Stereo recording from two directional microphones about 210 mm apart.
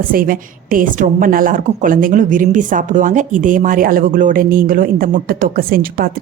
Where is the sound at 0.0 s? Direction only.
40° right (ahead or behind).